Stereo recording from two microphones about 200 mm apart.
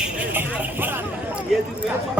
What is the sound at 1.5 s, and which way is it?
Speech, centre (ahead or behind).